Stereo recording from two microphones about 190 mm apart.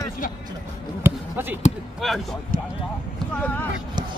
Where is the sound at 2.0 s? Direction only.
Centre (ahead or behind).